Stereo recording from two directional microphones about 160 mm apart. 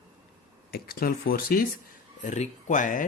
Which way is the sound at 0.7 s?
70° left (ahead or behind).